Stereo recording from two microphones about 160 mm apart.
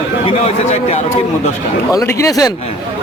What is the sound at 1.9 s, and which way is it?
Speech, 20° left (ahead or behind).